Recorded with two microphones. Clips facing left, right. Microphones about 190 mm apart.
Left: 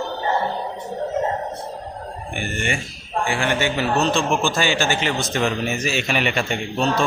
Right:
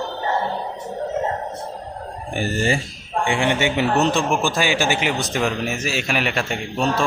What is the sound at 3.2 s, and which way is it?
A man's voice, 20° right (ahead or behind).